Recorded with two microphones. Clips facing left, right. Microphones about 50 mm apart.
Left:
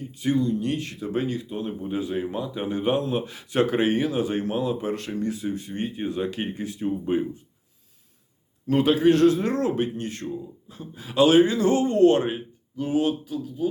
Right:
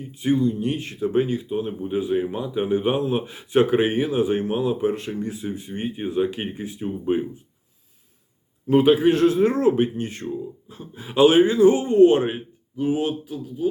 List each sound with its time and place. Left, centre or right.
0.0 s a man's voice: centre
8.6 s a man's voice: centre